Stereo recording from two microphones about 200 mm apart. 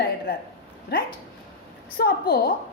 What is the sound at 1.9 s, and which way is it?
Speech, 50° left (ahead or behind).